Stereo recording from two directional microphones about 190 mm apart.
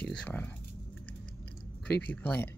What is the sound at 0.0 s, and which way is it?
Speech, 5° left (ahead or behind).